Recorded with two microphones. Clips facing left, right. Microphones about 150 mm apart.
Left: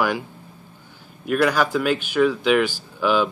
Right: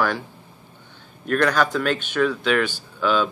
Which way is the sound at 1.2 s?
10° left (ahead or behind).